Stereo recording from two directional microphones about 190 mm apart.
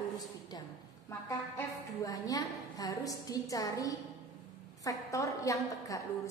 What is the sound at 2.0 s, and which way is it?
A woman's voice, 20° left (ahead or behind).